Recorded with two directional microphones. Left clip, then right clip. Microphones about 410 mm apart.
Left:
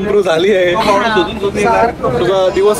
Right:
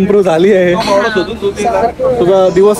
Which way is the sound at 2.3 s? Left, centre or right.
Centre.